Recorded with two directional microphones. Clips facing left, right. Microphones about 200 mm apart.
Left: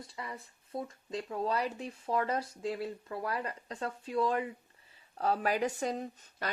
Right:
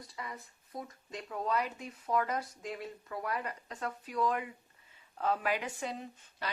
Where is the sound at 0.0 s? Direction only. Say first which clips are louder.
Left 1 dB; 30° left (ahead or behind).